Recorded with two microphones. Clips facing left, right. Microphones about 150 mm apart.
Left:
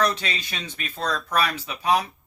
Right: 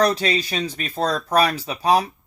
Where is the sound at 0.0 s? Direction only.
35° right (ahead or behind).